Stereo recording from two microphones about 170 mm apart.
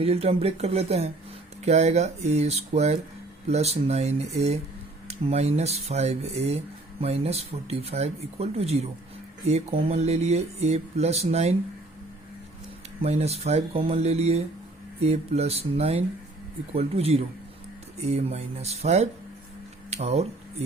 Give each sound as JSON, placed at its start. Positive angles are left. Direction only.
{"t": 0.0, "sound": "speech", "side_deg": -35}
{"t": 13.0, "sound": "speech", "side_deg": -35}